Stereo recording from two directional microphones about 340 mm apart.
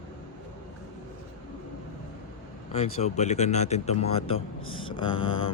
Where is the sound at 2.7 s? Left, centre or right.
Centre.